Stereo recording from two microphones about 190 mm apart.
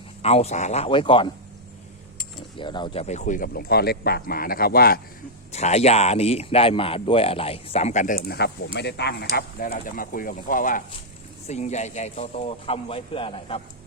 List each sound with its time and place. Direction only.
0.2 s speech: 35° left (ahead or behind)
2.6 s speech: 25° left (ahead or behind); by 4.9 s 55° left (ahead or behind)
5.5 s speech: 35° left (ahead or behind); by 9.2 s 60° left (ahead or behind)
9.3 s speech: 45° left (ahead or behind); by 13.6 s 30° left (ahead or behind)